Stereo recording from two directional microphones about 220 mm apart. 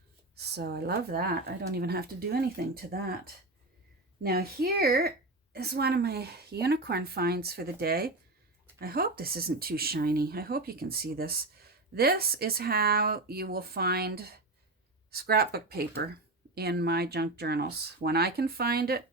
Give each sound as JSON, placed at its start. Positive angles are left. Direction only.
{"t": 0.3, "sound": "speech", "side_deg": -45}